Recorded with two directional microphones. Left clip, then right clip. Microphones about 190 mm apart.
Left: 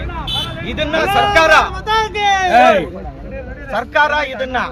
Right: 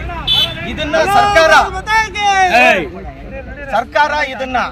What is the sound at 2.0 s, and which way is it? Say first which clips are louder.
Speech: right 2 dB; 45° left (ahead or behind).